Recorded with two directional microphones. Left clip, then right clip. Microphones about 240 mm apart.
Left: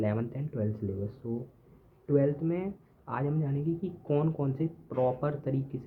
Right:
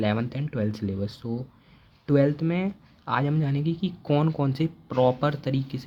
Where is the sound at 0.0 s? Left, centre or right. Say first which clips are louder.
Right 5 dB; right.